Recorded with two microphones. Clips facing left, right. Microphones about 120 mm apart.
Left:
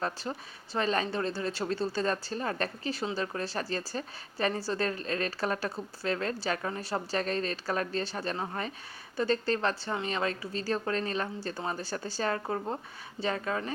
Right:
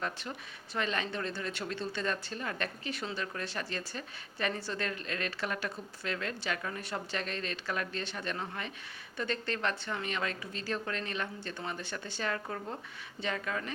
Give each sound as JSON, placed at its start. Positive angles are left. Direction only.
{"t": 0.0, "sound": "a woman's voice", "side_deg": 35}